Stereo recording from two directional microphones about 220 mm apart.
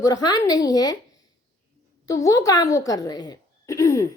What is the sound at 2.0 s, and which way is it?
A woman's voice, 15° left (ahead or behind).